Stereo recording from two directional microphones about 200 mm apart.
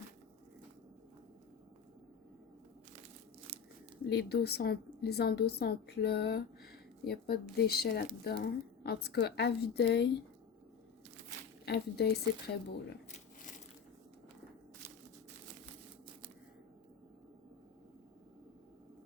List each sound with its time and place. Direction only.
4.0 s a woman's voice: 55° left (ahead or behind)
11.6 s speech: 55° left (ahead or behind)